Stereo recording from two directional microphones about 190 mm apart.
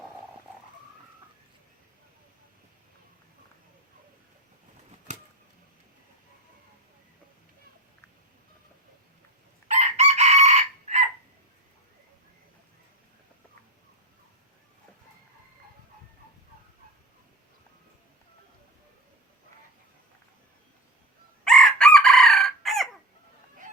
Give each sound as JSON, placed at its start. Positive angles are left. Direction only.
{"t": 9.6, "sound": "chicken", "side_deg": -35}
{"t": 21.4, "sound": "chicken", "side_deg": 0}